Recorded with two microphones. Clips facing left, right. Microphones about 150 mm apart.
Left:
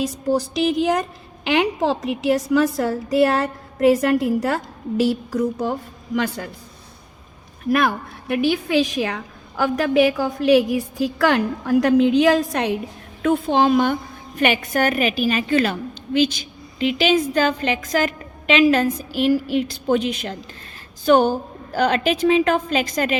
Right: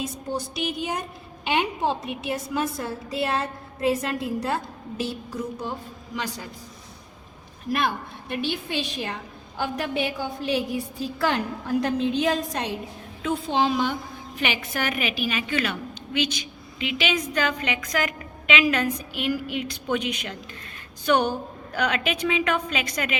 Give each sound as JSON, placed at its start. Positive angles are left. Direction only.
{"t": 0.0, "sound": "a woman's voice", "side_deg": 90}
{"t": 6.1, "sound": "speech", "side_deg": 55}
{"t": 7.7, "sound": "speech", "side_deg": 60}
{"t": 8.4, "sound": "a woman's voice", "side_deg": 90}
{"t": 13.2, "sound": "a woman's voice", "side_deg": 50}